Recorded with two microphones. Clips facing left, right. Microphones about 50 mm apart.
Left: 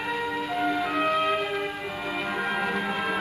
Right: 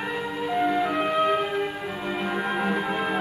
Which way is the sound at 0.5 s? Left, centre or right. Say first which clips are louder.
Right 4 dB; centre.